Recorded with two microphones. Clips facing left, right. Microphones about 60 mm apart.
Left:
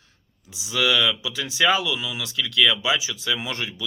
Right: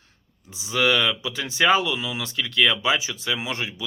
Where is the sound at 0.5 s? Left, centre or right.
Right.